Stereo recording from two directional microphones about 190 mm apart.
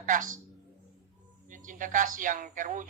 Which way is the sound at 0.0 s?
45° right (ahead or behind).